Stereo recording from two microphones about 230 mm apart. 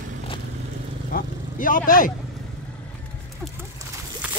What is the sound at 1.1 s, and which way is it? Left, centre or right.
Vehicle, left.